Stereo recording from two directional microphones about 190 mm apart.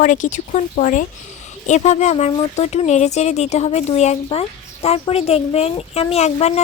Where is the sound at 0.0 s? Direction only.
40° left (ahead or behind).